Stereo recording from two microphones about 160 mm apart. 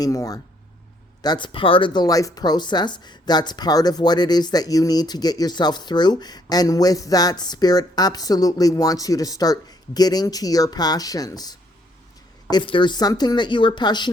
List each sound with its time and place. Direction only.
0.0 s speech: 20° left (ahead or behind)